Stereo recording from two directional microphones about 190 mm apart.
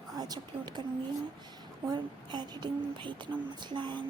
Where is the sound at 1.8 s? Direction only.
20° right (ahead or behind).